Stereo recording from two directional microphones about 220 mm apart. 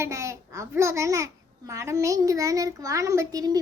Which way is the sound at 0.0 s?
15° right (ahead or behind).